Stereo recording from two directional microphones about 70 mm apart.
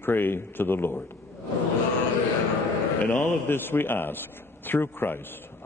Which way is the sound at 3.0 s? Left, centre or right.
Left.